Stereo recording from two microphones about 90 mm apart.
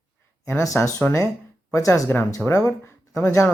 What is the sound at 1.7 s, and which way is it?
Speech, 35° left (ahead or behind).